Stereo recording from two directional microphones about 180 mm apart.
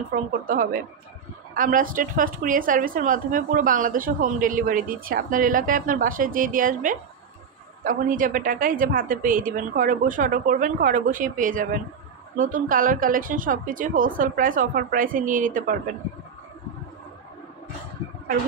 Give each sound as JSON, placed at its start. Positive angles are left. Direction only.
{"t": 0.1, "sound": "a woman's voice", "side_deg": -50}